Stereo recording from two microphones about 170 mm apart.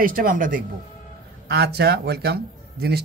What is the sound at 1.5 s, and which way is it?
Speech, 70° right (ahead or behind).